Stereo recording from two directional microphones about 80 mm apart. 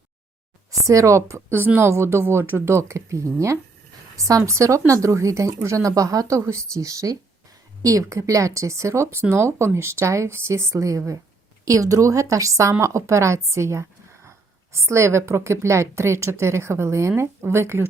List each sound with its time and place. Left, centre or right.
0.7 s a woman's voice: right